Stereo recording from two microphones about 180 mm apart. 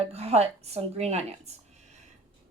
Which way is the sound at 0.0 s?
35° right (ahead or behind).